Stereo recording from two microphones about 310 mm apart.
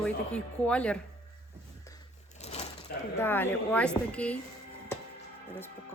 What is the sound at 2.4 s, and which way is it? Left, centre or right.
Sewing machine, left.